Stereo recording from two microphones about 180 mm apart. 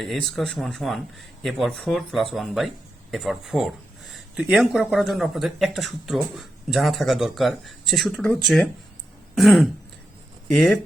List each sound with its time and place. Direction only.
0.0 s speech: centre (ahead or behind)
9.3 s throat clearing: centre (ahead or behind)
10.5 s speech: centre (ahead or behind)